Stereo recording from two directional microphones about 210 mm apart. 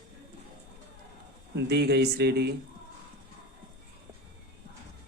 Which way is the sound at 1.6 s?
50° right (ahead or behind).